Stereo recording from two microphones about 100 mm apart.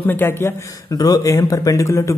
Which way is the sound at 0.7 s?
40° left (ahead or behind).